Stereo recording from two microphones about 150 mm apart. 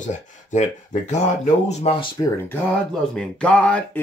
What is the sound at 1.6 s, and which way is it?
Speech, 35° left (ahead or behind).